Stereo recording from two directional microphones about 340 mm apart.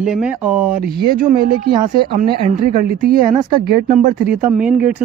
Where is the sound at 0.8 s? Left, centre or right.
Right.